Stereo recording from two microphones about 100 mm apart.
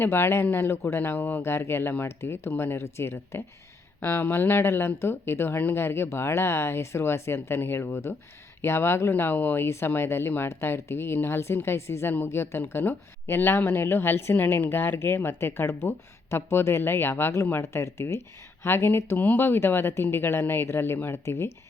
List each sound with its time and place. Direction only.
0.0 s speech: 25° left (ahead or behind)